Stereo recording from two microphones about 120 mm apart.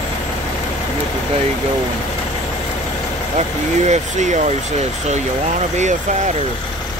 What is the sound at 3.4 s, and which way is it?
Speech, 70° right (ahead or behind).